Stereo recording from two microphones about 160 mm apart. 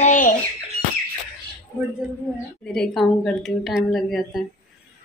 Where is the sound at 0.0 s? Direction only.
55° left (ahead or behind).